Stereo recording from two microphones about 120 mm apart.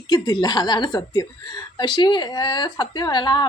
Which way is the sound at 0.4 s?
35° left (ahead or behind).